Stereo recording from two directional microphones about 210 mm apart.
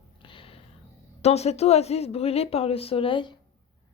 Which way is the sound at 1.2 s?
30° left (ahead or behind).